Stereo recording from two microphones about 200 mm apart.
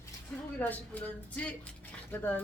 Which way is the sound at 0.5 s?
10° left (ahead or behind).